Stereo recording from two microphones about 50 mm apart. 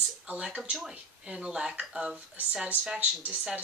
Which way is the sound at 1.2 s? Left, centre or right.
Centre.